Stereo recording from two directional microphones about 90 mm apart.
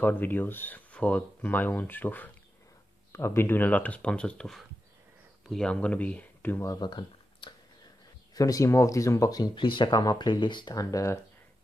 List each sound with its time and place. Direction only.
0.0 s speech: 20° left (ahead or behind)
6.8 s a sound: 55° left (ahead or behind)
8.4 s speech: 40° left (ahead or behind)
9.6 s speech: 65° left (ahead or behind)
10.7 s speech: 40° left (ahead or behind)